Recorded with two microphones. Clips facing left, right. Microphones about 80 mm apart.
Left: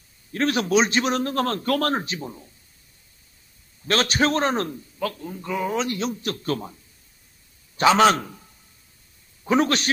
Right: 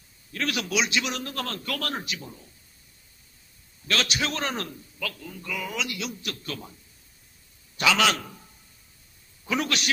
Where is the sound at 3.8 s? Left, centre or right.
Left.